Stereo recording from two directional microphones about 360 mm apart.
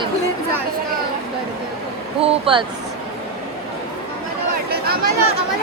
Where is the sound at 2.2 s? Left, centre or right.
Centre.